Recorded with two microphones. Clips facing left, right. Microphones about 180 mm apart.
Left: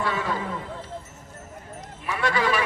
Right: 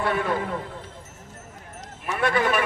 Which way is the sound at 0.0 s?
55° right (ahead or behind).